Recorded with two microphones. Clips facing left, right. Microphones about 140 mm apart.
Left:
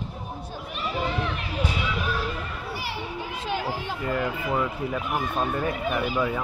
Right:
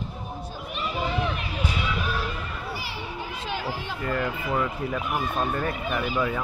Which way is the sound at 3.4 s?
45° left (ahead or behind).